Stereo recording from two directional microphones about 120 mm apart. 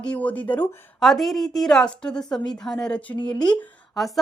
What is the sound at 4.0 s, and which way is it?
Speech, centre (ahead or behind).